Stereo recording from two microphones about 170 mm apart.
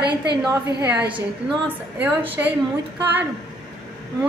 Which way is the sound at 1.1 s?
30° right (ahead or behind).